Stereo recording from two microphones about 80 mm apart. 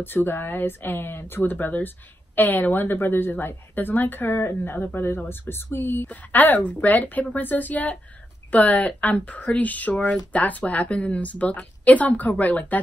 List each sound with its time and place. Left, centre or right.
0.0 s a woman's voice: left